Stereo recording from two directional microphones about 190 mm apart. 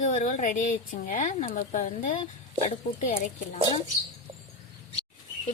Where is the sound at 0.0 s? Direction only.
40° left (ahead or behind).